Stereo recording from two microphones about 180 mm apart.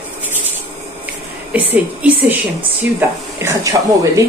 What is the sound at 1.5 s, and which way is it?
Speech, 10° right (ahead or behind).